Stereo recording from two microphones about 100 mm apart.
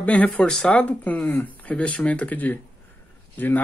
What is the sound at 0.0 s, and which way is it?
Speech, 15° left (ahead or behind).